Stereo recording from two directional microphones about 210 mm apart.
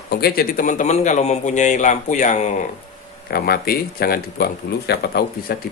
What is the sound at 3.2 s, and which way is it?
Speech, 45° left (ahead or behind).